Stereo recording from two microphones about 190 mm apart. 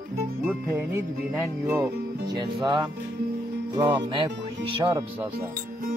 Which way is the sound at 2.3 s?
20° right (ahead or behind).